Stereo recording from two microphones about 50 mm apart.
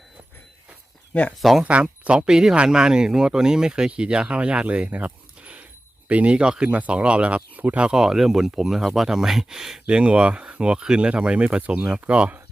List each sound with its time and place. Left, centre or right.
1.4 s speech: centre
1.6 s speech: right
7.9 s speech: centre